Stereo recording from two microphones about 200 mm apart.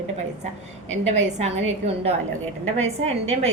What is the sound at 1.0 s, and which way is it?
A woman's voice, 30° right (ahead or behind).